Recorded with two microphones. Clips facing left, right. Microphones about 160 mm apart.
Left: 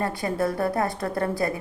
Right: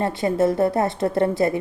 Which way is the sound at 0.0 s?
25° right (ahead or behind).